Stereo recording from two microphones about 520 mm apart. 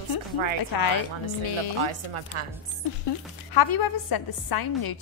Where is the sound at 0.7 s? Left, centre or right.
Left.